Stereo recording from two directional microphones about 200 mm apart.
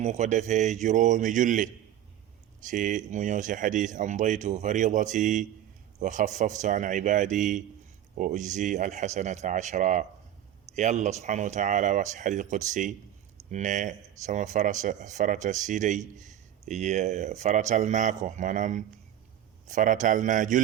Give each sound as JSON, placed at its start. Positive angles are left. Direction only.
{"t": 0.0, "sound": "speech", "side_deg": -35}